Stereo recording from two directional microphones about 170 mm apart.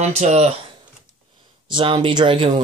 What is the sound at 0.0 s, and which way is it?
Speech, 40° right (ahead or behind).